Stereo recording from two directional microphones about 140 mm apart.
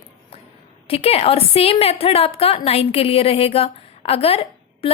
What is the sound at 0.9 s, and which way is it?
A woman's voice, 45° left (ahead or behind).